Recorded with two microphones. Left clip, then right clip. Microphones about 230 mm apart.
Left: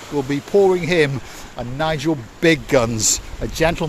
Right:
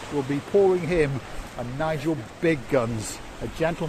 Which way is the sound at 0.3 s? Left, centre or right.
Left.